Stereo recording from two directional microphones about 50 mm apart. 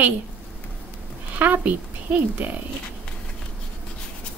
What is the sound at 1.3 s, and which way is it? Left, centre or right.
Speech, right.